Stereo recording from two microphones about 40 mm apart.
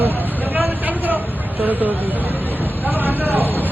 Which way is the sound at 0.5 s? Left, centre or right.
Right.